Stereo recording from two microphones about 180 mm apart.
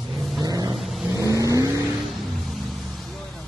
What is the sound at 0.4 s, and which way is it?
Vehicle, 20° right (ahead or behind).